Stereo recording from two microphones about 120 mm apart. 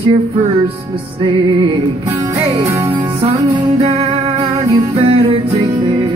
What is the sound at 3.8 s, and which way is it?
Music, 55° right (ahead or behind).